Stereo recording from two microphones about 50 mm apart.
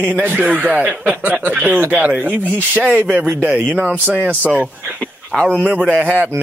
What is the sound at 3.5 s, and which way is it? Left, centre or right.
Speech, right.